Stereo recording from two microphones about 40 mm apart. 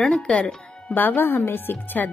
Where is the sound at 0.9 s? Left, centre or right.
Left.